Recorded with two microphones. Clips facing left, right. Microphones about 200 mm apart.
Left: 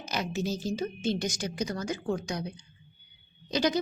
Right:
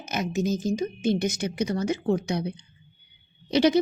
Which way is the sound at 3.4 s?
25° right (ahead or behind).